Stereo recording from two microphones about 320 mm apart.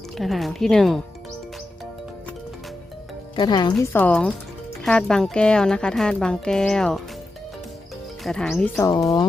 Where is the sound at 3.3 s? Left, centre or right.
Centre.